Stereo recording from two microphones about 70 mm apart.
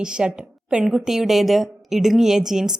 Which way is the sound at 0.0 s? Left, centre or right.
Centre.